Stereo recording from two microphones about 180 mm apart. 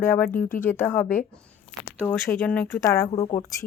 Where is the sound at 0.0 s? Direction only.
15° left (ahead or behind).